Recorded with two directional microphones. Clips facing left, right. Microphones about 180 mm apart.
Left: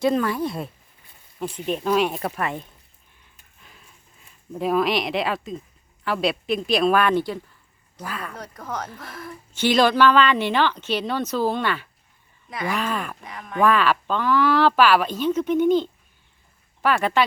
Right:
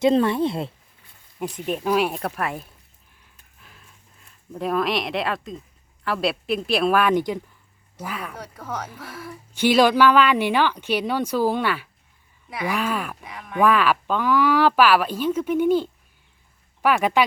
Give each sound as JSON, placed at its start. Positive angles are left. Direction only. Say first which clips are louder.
{"t": 0.0, "sound": "speech", "louder": "right 3 dB", "side_deg": -25}
{"t": 1.4, "sound": "speech", "louder": "even", "side_deg": -10}
{"t": 3.6, "sound": "a sound", "louder": "even", "side_deg": 0}
{"t": 6.1, "sound": "a woman's voice", "louder": "left 1 dB", "side_deg": 0}